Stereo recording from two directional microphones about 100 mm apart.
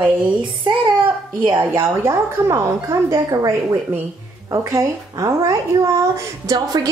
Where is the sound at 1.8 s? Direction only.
30° right (ahead or behind).